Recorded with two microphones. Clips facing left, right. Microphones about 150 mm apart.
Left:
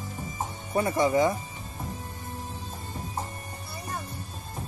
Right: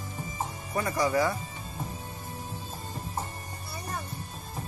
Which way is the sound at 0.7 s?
25° left (ahead or behind).